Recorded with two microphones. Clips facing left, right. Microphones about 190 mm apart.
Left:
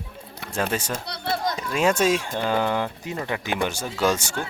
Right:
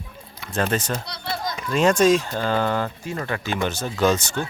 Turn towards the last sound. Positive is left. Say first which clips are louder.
# right 3 dB
turn(degrees=10)  # may be behind; listen again after turning